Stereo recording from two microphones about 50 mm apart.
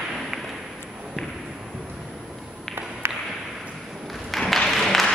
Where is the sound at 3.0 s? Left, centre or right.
Right.